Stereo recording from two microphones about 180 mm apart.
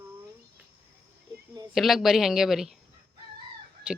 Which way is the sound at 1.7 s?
Centre (ahead or behind).